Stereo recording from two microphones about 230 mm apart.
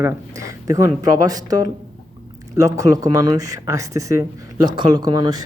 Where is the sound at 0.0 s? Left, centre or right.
Centre.